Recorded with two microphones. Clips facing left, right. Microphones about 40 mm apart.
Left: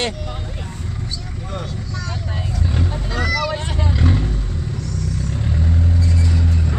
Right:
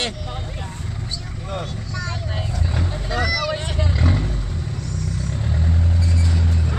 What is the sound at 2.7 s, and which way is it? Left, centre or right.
Honk, centre.